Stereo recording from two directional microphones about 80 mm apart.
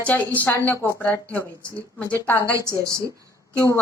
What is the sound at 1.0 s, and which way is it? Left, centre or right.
Speech, centre.